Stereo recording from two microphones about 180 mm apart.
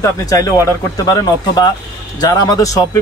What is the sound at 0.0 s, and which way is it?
Speech, 20° left (ahead or behind).